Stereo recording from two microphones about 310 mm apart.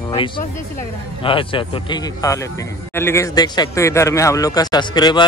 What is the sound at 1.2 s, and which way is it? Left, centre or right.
A man's voice, centre.